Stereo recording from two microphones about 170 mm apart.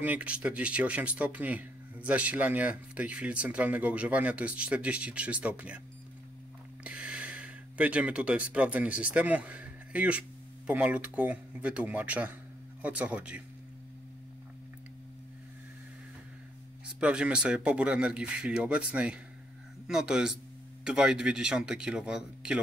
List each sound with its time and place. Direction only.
0.0 s speech: 10° right (ahead or behind)
6.8 s speech: 5° right (ahead or behind)
17.0 s speech: 5° right (ahead or behind)